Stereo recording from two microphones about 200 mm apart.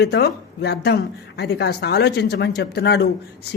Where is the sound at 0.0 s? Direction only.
55° left (ahead or behind).